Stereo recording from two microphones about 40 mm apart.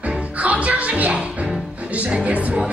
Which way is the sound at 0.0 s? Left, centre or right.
Right.